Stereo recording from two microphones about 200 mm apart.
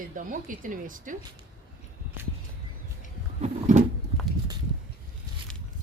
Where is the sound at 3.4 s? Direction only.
35° right (ahead or behind).